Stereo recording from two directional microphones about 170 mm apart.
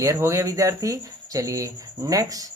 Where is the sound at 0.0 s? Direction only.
15° right (ahead or behind).